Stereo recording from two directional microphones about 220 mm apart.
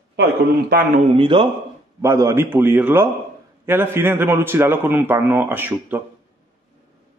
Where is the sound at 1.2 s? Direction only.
20° right (ahead or behind).